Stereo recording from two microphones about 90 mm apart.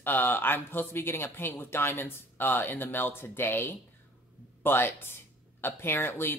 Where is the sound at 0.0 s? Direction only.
20° left (ahead or behind).